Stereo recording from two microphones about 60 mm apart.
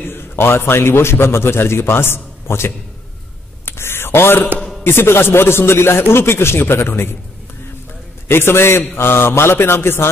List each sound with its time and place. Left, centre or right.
0.1 s a man's voice: left
3.6 s a sound: left
4.8 s speech: left
8.3 s speech: left